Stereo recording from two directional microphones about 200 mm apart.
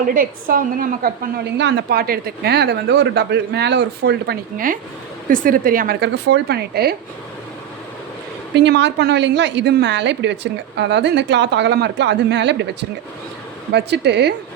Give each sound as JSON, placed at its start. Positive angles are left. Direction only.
{"t": 0.1, "sound": "a woman's voice", "side_deg": -45}
{"t": 8.5, "sound": "a woman's voice", "side_deg": -60}
{"t": 13.7, "sound": "a woman's voice", "side_deg": -55}